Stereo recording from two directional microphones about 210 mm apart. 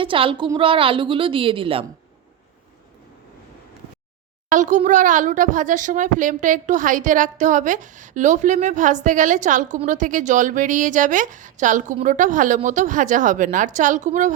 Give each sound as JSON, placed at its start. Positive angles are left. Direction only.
{"t": 0.0, "sound": "a woman's voice", "side_deg": -25}
{"t": 4.4, "sound": "speech", "side_deg": -35}